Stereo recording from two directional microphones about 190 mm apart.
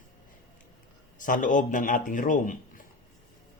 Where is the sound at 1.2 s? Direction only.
45° left (ahead or behind).